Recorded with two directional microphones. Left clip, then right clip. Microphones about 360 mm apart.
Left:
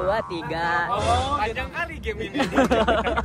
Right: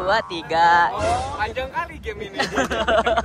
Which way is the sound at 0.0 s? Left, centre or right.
Centre.